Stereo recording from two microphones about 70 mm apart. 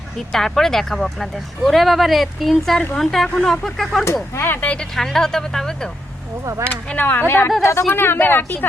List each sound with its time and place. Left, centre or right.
0.3 s speech: centre
4.0 s speech: left
4.9 s speech: centre
6.4 s speech: right
6.9 s speech: left
7.6 s speech: left
7.9 s speech: left